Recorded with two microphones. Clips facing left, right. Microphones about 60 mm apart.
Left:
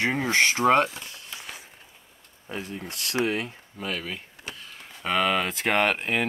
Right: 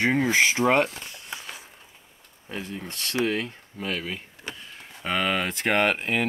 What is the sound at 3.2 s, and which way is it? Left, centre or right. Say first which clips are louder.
Speech: even; centre.